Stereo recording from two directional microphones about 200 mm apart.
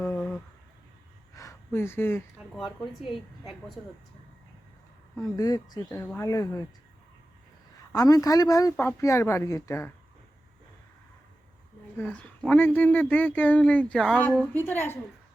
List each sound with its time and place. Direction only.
0.0 s a sound: 5° left (ahead or behind)
1.4 s speech: 15° left (ahead or behind)
3.0 s a woman's voice: centre (ahead or behind)
5.2 s speech: 20° left (ahead or behind)
7.9 s speech: 20° left (ahead or behind)
11.9 s speech: 5° left (ahead or behind)